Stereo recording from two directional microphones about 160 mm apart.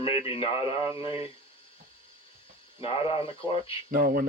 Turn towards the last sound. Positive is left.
turn(degrees=-70)  # may be behind; listen again after turning